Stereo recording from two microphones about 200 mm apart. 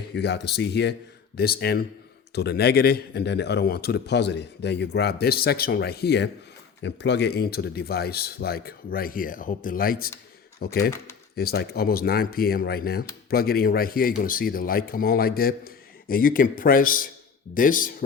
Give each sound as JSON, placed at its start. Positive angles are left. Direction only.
{"t": 0.1, "sound": "speech", "side_deg": 55}